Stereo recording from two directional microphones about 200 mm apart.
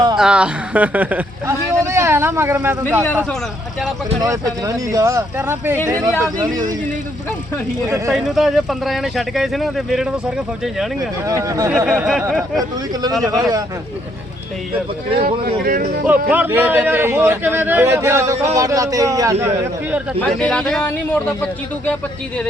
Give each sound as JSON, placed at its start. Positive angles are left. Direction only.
{"t": 0.2, "sound": "speech", "side_deg": -5}
{"t": 4.2, "sound": "a man's voice", "side_deg": -15}
{"t": 7.9, "sound": "a man's voice", "side_deg": -15}
{"t": 8.1, "sound": "speech", "side_deg": 0}
{"t": 11.3, "sound": "a man's voice", "side_deg": -15}
{"t": 12.9, "sound": "a man's voice", "side_deg": -20}
{"t": 15.1, "sound": "speech", "side_deg": -50}
{"t": 16.3, "sound": "a man's voice", "side_deg": -10}
{"t": 20.1, "sound": "speech", "side_deg": 5}